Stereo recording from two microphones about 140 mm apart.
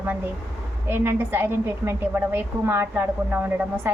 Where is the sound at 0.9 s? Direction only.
15° right (ahead or behind).